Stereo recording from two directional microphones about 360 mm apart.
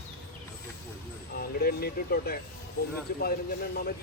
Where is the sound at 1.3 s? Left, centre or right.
Left.